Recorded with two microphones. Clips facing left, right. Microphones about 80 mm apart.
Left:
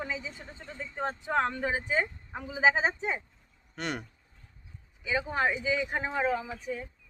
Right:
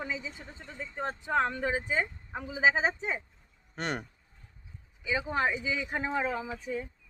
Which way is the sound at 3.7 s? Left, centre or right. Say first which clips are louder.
Right 1 dB; right.